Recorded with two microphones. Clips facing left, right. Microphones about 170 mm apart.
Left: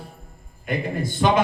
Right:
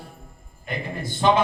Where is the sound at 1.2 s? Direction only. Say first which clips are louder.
Right 1 dB; 35° right (ahead or behind).